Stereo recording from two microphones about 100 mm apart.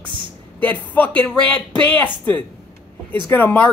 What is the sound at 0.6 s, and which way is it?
Speech, 15° left (ahead or behind).